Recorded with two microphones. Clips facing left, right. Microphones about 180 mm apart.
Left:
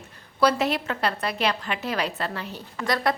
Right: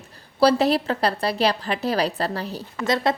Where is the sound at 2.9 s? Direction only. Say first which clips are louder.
Right 3 dB; 25° right (ahead or behind).